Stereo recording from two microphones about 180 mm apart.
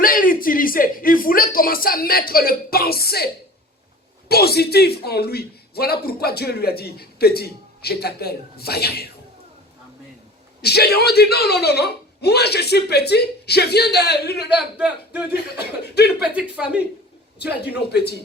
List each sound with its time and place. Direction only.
0.0 s speech: 50° left (ahead or behind)
4.3 s a man's voice: 60° left (ahead or behind)
10.6 s a man's voice: 65° left (ahead or behind)
14.5 s a man's voice: 10° right (ahead or behind)
15.8 s a man's voice: 65° left (ahead or behind)
16.3 s a man's voice: 5° right (ahead or behind)
17.7 s a man's voice: 65° left (ahead or behind)